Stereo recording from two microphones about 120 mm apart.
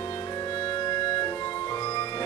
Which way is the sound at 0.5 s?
45° left (ahead or behind).